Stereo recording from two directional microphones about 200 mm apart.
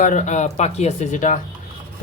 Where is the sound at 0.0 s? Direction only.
40° left (ahead or behind).